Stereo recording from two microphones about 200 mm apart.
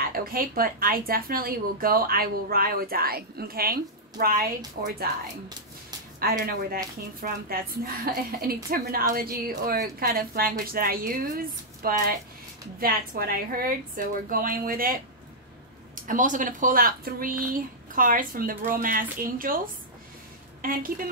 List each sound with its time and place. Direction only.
0.1 s speech: 45° right (ahead or behind)
6.1 s speech: 45° right (ahead or behind)
16.1 s speech: 40° right (ahead or behind)